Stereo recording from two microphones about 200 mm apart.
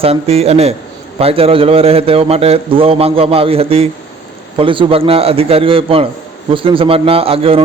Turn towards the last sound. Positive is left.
turn(degrees=-30)  # may be behind; listen again after turning